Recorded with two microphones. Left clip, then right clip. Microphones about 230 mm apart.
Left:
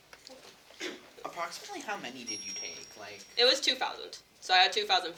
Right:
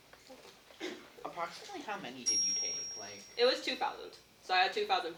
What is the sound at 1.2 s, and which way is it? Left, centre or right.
Speech, left.